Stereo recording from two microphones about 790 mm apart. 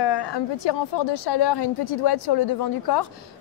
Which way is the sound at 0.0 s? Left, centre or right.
Left.